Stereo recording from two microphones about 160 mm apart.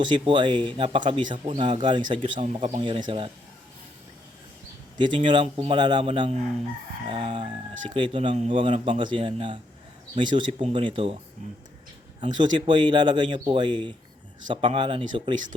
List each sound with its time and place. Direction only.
0.0 s speech: 30° right (ahead or behind)
4.9 s speech: 30° right (ahead or behind)
12.2 s speech: 30° right (ahead or behind)